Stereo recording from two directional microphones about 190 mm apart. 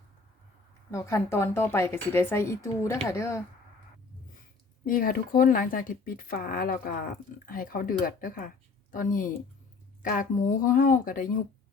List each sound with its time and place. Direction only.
0.9 s speech: 15° left (ahead or behind)
4.9 s speech: 50° left (ahead or behind)